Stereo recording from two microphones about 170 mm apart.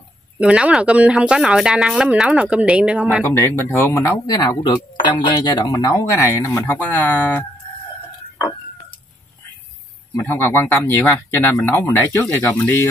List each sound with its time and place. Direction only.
0.4 s speech: 5° right (ahead or behind)
3.3 s speech: 15° left (ahead or behind)
10.2 s speech: 15° left (ahead or behind)